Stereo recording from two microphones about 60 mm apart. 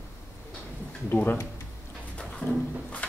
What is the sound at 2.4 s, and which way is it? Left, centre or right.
Speech, left.